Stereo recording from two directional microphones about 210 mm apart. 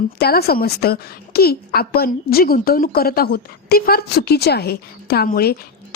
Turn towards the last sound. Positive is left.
turn(degrees=45)  # may be behind; listen again after turning